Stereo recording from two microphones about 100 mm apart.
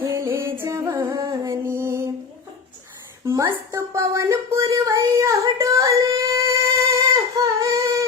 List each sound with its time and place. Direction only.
0.0 s music: 30° right (ahead or behind)
0.9 s music: 40° right (ahead or behind); by 2.0 s 25° right (ahead or behind)
3.7 s a sound: 30° right (ahead or behind)